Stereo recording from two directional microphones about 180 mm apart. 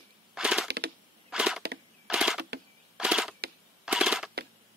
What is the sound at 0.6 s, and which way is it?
Typewriter, 65° right (ahead or behind).